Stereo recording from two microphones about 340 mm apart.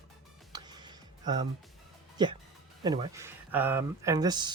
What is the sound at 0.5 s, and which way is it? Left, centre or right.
Music, centre.